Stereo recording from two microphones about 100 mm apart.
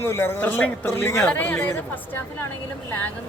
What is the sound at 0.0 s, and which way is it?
Speech, 25° left (ahead or behind).